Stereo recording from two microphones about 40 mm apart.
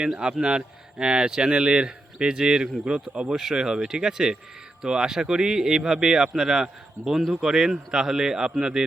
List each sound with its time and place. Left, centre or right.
0.0 s speech: right
3.2 s speech: centre